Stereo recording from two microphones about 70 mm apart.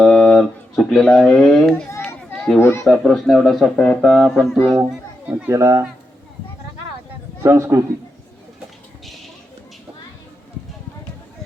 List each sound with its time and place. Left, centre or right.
0.0 s a sound: centre
1.2 s speech: centre
2.3 s children playing: centre
2.6 s speech: left
2.8 s speech: centre
5.5 s a man's voice: right
7.4 s a man's voice: right